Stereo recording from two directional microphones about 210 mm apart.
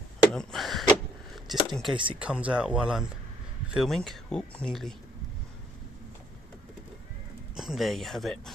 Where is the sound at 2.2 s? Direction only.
5° right (ahead or behind).